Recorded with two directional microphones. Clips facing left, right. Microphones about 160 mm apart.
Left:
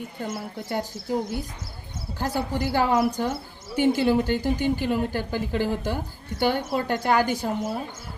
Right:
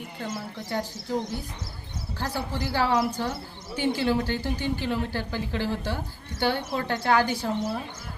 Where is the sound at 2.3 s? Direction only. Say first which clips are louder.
Left 5 dB; 15° left (ahead or behind).